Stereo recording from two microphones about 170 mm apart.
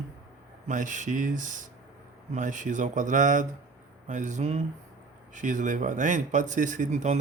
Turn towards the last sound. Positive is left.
turn(degrees=-45)  # may be behind; listen again after turning